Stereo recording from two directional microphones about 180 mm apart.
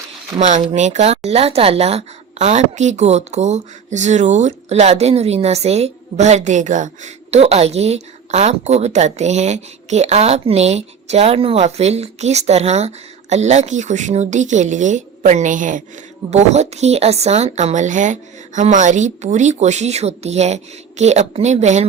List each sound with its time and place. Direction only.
0.3 s a woman's voice: 35° right (ahead or behind)